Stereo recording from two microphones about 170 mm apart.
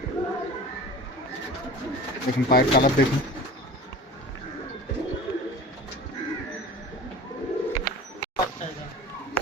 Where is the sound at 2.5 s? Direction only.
60° left (ahead or behind).